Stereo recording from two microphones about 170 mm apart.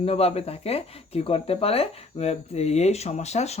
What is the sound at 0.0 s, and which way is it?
Speech, 35° left (ahead or behind).